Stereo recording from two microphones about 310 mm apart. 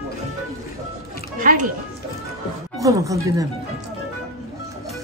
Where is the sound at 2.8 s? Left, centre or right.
Centre.